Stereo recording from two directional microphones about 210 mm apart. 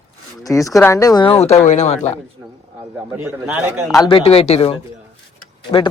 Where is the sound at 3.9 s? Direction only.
20° left (ahead or behind).